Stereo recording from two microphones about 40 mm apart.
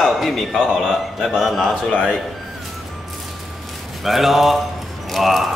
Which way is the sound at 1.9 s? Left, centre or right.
Left.